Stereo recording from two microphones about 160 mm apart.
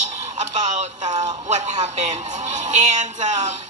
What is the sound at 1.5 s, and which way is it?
Speech, 50° right (ahead or behind).